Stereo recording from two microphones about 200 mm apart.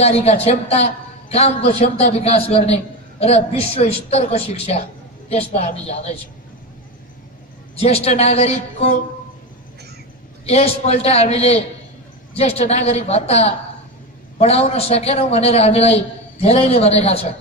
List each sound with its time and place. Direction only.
0.0 s a man's voice: 30° left (ahead or behind)
7.7 s a man's voice: 30° left (ahead or behind)
10.4 s a man's voice: 30° left (ahead or behind)